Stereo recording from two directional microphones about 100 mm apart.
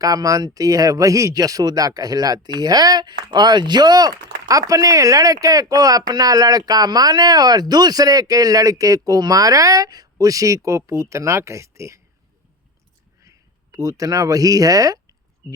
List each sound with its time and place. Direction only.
0.0 s speech: 35° right (ahead or behind)
13.2 s speech: 35° right (ahead or behind)